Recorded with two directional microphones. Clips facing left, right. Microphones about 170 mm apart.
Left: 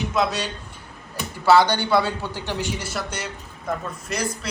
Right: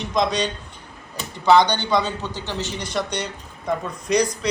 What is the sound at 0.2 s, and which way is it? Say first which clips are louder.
A man's voice: right 3 dB; 5° left (ahead or behind).